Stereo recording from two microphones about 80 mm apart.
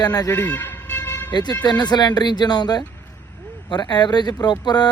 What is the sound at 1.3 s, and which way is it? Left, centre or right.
Speech, left.